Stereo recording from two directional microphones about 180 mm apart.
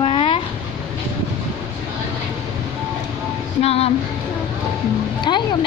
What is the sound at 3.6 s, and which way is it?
Speech, 35° left (ahead or behind).